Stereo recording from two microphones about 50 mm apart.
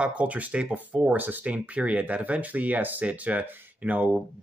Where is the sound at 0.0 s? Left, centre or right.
Right.